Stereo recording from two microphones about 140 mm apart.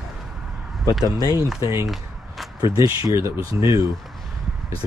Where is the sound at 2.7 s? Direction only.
20° right (ahead or behind).